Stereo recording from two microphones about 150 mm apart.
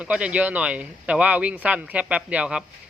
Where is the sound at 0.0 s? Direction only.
10° right (ahead or behind).